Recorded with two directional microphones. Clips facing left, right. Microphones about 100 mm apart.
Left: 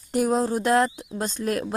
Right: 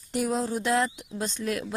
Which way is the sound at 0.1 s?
45° left (ahead or behind).